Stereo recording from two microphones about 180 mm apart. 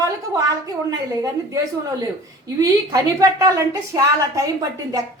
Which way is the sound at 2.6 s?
20° right (ahead or behind).